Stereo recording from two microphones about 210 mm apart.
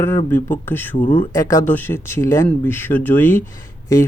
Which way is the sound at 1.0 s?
30° left (ahead or behind).